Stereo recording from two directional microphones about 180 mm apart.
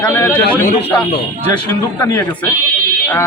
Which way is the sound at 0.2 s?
10° left (ahead or behind).